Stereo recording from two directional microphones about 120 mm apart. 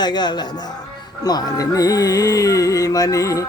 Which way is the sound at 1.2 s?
35° left (ahead or behind).